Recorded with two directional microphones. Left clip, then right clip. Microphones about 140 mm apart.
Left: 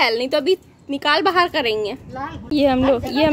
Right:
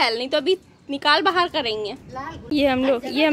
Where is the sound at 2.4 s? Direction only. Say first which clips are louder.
Left 3 dB; centre (ahead or behind).